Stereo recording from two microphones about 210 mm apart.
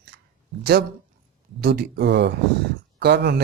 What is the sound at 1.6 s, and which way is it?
Speech, 50° right (ahead or behind).